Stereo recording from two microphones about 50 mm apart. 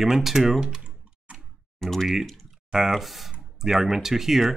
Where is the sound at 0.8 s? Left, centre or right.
Right.